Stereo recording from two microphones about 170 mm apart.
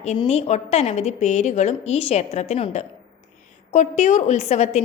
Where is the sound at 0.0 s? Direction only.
40° left (ahead or behind).